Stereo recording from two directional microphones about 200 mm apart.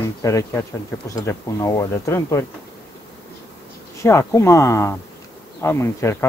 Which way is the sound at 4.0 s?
15° left (ahead or behind).